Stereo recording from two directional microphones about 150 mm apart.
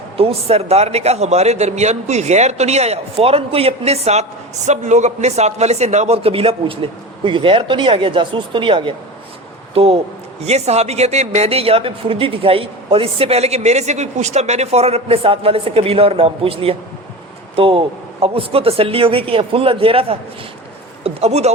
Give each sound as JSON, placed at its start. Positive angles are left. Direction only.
{"t": 0.2, "sound": "a man's voice", "side_deg": -40}